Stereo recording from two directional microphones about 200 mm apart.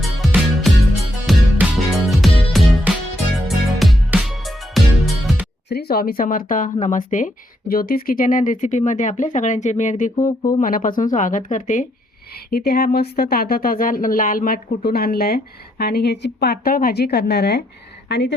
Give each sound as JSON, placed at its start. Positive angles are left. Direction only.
{"t": 0.0, "sound": "music", "side_deg": 0}
{"t": 5.6, "sound": "speech", "side_deg": 55}